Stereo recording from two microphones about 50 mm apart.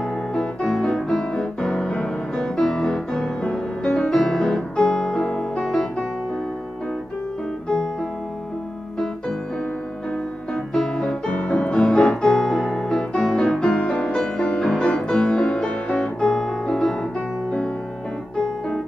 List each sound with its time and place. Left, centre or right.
0.7 s music: centre
10.5 s music: centre
11.1 s music: left; by 12.7 s centre
13.2 s music: left
16.2 s piano: centre